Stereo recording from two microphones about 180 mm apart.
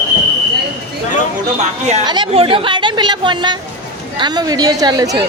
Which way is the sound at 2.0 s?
25° right (ahead or behind).